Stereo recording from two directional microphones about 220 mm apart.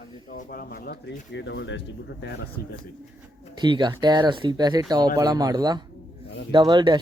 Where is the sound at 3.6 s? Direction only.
20° right (ahead or behind).